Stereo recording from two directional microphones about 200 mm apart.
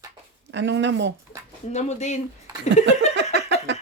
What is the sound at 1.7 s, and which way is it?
Speech, 35° left (ahead or behind).